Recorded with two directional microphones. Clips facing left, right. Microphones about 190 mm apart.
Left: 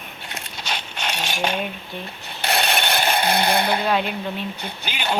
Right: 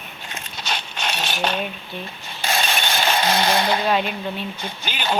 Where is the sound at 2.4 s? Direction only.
65° left (ahead or behind).